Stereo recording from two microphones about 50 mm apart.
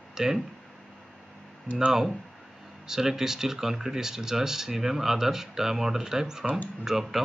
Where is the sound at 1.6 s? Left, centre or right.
Centre.